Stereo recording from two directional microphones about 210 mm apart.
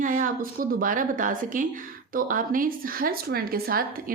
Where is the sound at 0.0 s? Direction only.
40° right (ahead or behind).